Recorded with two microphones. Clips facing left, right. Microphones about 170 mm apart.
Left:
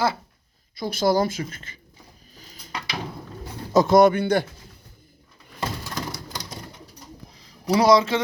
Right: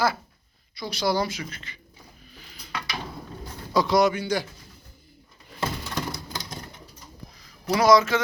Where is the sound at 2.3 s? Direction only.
40° left (ahead or behind).